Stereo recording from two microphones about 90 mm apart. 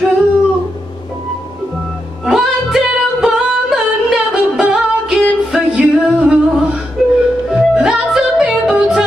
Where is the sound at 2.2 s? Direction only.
Centre (ahead or behind).